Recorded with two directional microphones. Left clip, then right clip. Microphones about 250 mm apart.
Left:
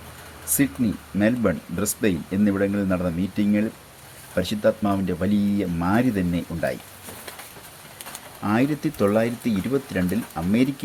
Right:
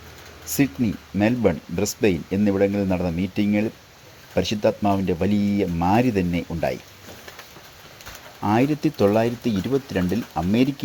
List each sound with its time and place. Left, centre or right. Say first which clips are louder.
0.4 s a sound: right 1 dB; right
1.2 s speech: right 2 dB; right
8.4 s speech: right 3 dB; right